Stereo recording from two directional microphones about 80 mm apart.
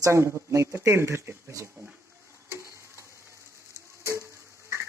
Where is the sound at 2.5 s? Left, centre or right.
Right.